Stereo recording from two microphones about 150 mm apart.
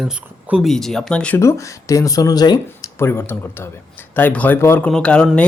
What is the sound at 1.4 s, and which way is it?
Speech, 20° left (ahead or behind).